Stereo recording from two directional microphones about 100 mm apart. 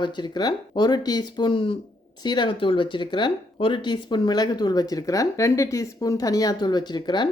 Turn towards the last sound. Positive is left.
turn(degrees=50)  # may be behind; listen again after turning